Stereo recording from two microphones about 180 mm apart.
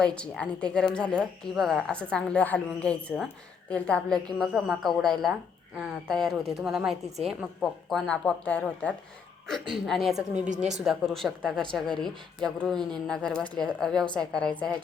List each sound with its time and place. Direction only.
0.0 s a woman's voice: 5° left (ahead or behind)
10.5 s speech: 40° right (ahead or behind)
10.8 s a woman's voice: centre (ahead or behind)